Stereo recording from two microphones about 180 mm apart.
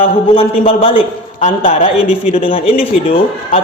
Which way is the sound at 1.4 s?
45° left (ahead or behind).